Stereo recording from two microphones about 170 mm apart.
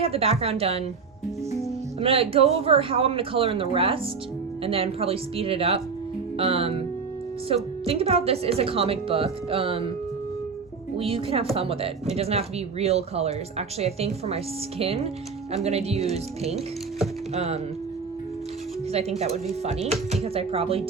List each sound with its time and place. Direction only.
0.0 s speech: 35° right (ahead or behind)
2.0 s speech: 35° right (ahead or behind)
10.9 s speech: 35° right (ahead or behind)
18.9 s speech: 40° right (ahead or behind)